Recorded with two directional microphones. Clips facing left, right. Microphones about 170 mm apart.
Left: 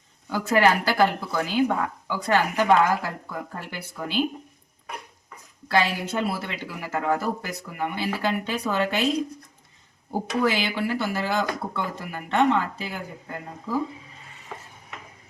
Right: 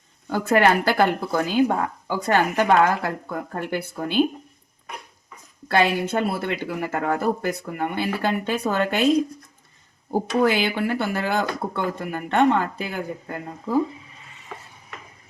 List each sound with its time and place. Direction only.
0.3 s speech: 55° right (ahead or behind)
5.6 s speech: 55° right (ahead or behind)
10.4 s speech: 55° right (ahead or behind)